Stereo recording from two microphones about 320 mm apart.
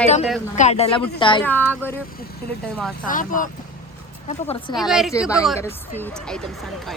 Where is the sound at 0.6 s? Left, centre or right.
Centre.